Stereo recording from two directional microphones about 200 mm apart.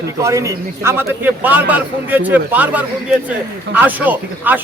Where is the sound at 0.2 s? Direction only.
15° right (ahead or behind).